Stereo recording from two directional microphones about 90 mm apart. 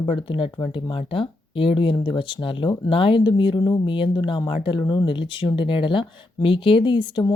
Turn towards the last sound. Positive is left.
turn(degrees=60)  # may be behind; listen again after turning